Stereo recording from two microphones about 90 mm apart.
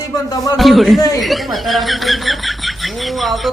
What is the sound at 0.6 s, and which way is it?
Speech, centre (ahead or behind).